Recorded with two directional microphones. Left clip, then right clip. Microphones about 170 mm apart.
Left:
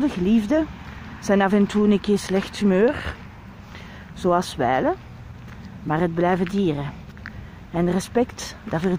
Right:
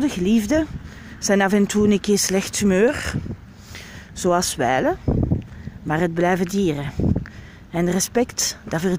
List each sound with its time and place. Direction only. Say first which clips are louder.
0.0 s speech: right 1 dB; 10° right (ahead or behind)
4.2 s speech: right 1 dB; 15° right (ahead or behind)